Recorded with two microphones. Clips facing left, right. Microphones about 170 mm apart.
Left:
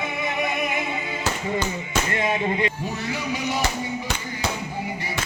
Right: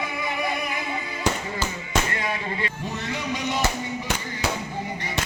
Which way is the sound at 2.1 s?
25° left (ahead or behind).